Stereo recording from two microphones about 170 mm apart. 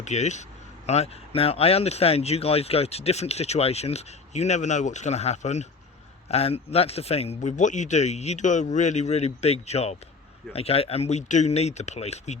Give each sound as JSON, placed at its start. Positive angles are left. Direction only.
{"t": 0.0, "sound": "speech", "side_deg": 45}